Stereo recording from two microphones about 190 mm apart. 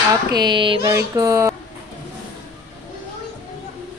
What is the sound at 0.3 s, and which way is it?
A woman's voice, 25° right (ahead or behind).